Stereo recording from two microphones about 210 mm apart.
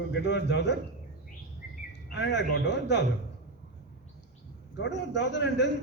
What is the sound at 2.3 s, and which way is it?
Speech, 55° left (ahead or behind).